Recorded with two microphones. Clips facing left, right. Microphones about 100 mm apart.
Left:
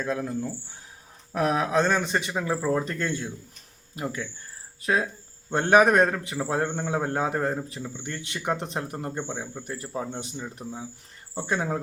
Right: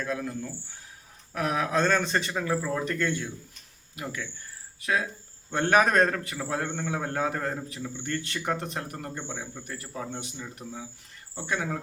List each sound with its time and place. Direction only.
0.0 s a man's voice: 25° left (ahead or behind)
1.3 s a man's voice: 30° left (ahead or behind)
4.8 s a man's voice: 35° left (ahead or behind); by 6.2 s 15° left (ahead or behind)
6.2 s a man's voice: 25° left (ahead or behind)